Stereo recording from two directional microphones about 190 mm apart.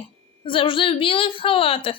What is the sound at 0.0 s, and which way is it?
A woman's voice, 30° left (ahead or behind).